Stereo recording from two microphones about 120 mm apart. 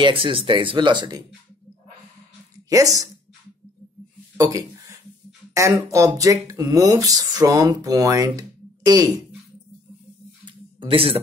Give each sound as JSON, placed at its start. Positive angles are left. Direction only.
{"t": 0.0, "sound": "speech", "side_deg": -45}
{"t": 2.7, "sound": "speech", "side_deg": -30}
{"t": 4.4, "sound": "speech", "side_deg": -30}
{"t": 10.4, "sound": "a sound", "side_deg": -45}